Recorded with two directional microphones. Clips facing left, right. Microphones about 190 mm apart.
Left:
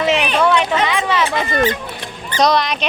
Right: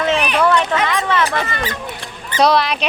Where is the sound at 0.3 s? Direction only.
Centre (ahead or behind).